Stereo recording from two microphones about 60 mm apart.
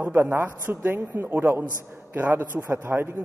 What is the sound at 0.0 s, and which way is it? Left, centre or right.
A man's voice, right.